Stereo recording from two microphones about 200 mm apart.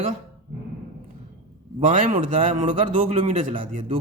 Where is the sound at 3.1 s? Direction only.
30° right (ahead or behind).